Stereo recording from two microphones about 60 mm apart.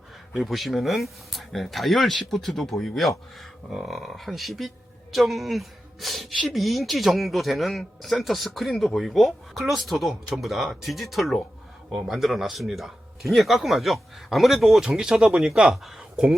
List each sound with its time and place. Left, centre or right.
0.3 s speech: centre